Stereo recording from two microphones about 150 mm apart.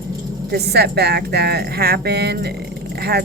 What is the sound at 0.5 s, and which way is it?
Speech, 90° right.